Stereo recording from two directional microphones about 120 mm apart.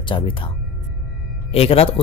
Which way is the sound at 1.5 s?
55° left (ahead or behind).